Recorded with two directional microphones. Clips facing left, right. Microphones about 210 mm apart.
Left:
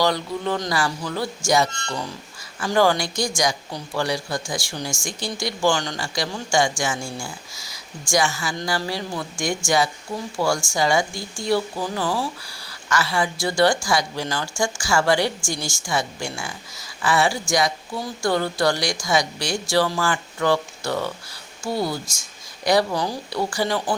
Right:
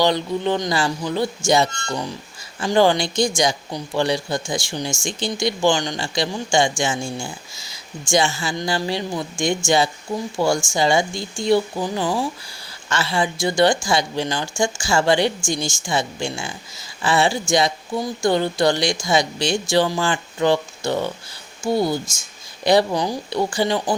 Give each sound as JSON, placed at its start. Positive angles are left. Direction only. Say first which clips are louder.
{"t": 0.0, "sound": "speech", "louder": "right 3 dB", "side_deg": -20}